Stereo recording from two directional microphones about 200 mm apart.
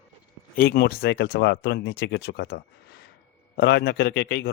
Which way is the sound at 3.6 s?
55° left (ahead or behind).